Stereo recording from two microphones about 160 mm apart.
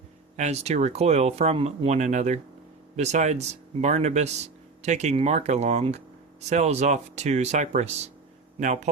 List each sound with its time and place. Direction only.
0.3 s speech: 45° right (ahead or behind)